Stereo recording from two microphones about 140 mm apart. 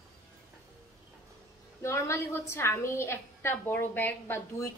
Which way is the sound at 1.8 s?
20° left (ahead or behind).